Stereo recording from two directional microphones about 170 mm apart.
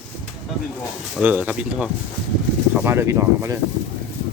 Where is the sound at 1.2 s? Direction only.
10° right (ahead or behind).